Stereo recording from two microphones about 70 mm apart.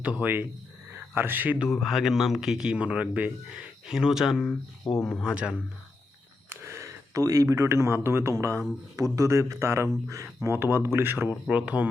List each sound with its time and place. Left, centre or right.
0.0 s speech: right
1.5 s speech: centre
3.8 s speech: centre
6.5 s speech: right
10.5 s speech: right
11.4 s speech: centre